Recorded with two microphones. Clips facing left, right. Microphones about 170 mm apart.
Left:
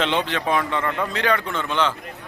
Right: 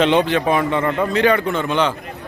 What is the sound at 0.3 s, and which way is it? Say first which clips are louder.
Speech: right 5 dB; 10° right (ahead or behind).